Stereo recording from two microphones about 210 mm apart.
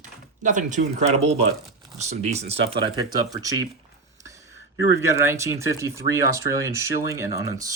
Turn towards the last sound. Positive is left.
turn(degrees=-15)  # may be behind; listen again after turning